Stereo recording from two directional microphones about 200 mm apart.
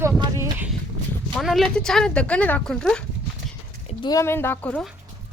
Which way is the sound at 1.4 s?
Centre (ahead or behind).